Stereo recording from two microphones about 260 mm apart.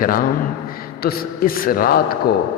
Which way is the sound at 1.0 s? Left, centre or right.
Left.